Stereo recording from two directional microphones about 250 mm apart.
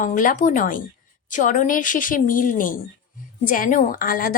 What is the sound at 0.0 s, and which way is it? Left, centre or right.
Speech, left.